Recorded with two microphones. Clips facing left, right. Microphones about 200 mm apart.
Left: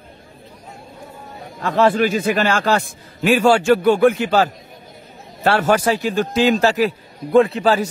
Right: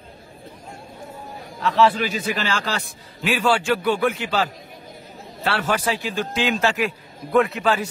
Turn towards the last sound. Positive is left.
turn(degrees=35)  # may be behind; listen again after turning